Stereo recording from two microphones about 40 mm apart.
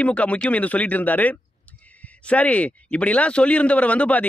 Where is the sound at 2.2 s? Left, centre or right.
Left.